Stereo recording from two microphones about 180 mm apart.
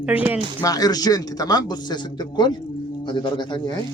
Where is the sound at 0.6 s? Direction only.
20° left (ahead or behind).